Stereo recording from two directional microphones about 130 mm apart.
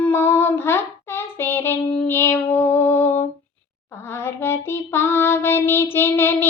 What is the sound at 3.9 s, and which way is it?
Child singing, 20° left (ahead or behind).